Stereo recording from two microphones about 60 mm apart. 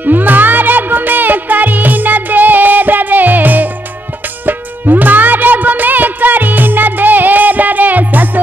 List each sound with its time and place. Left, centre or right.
0.0 s music: right